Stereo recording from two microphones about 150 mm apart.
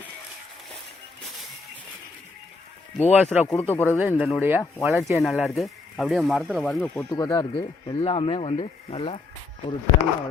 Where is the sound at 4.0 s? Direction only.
10° right (ahead or behind).